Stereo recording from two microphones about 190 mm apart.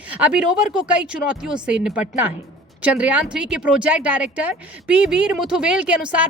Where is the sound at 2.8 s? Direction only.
5° right (ahead or behind).